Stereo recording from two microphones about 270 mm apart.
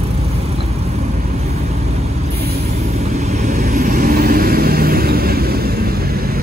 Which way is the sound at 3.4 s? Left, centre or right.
Right.